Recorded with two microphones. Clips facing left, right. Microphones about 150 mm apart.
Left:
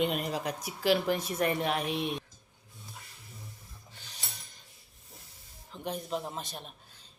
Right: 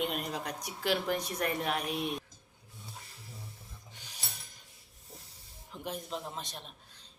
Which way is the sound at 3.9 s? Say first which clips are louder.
Left 3 dB; 10° right (ahead or behind).